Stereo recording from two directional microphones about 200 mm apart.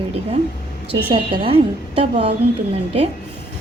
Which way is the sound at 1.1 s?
25° right (ahead or behind).